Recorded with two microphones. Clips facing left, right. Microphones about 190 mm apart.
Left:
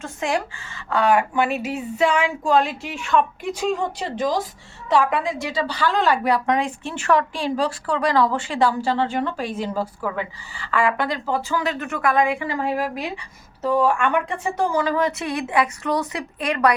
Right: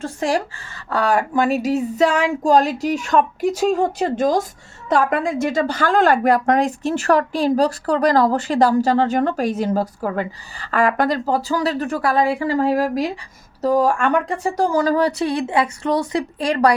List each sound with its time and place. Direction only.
0.0 s a woman's voice: 35° right (ahead or behind)